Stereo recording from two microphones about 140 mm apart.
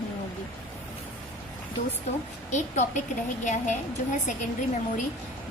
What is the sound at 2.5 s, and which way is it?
A woman's voice, 55° left (ahead or behind).